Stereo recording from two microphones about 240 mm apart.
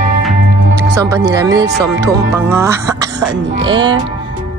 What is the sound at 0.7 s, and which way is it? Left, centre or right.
Music, centre.